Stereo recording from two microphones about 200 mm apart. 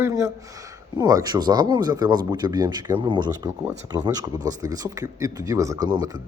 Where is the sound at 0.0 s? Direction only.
15° right (ahead or behind).